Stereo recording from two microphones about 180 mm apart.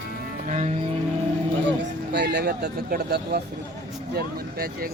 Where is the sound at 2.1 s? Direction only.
70° right (ahead or behind).